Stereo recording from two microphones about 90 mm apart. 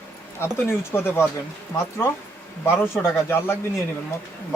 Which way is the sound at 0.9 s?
25° left (ahead or behind).